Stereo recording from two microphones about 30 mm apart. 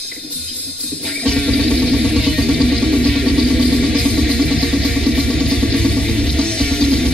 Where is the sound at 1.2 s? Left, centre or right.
Left.